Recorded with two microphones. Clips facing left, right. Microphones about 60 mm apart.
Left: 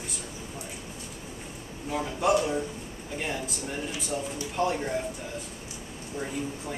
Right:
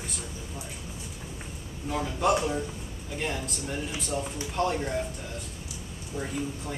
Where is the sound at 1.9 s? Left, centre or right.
Centre.